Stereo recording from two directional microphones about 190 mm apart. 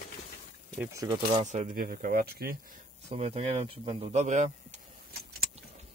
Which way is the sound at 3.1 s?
35° right (ahead or behind).